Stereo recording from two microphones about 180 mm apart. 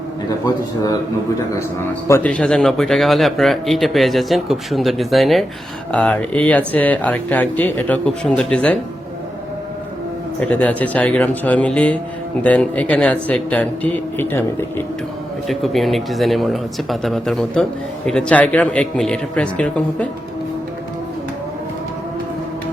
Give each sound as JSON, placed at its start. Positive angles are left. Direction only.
{"t": 0.4, "sound": "a man's voice", "side_deg": 20}
{"t": 2.0, "sound": "speech", "side_deg": 10}
{"t": 10.4, "sound": "speech", "side_deg": 5}
{"t": 15.4, "sound": "speech", "side_deg": 0}